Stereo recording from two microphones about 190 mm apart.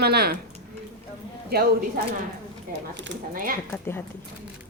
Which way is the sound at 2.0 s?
50° right (ahead or behind).